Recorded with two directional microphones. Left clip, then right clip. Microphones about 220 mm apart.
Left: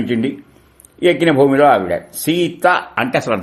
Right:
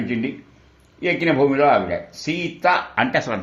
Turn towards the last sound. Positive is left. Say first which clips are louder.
# left 3 dB
turn(degrees=35)  # may be behind; listen again after turning